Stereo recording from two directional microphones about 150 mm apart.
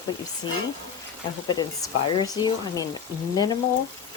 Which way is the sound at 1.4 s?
30° left (ahead or behind).